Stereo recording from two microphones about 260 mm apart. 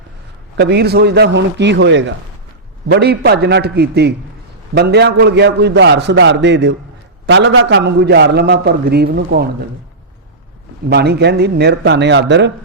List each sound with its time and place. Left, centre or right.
0.5 s a man's voice: right
10.8 s a man's voice: right